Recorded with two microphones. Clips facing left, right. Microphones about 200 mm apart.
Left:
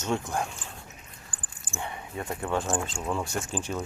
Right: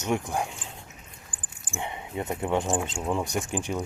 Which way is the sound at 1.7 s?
20° right (ahead or behind).